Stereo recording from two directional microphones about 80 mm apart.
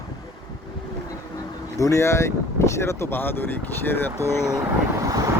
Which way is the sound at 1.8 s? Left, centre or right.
Left.